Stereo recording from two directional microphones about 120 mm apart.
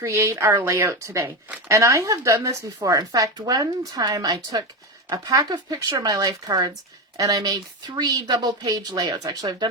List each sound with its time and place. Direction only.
0.0 s speech: 25° right (ahead or behind)